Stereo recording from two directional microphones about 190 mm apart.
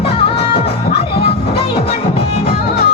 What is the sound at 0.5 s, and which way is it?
Music, 60° left (ahead or behind).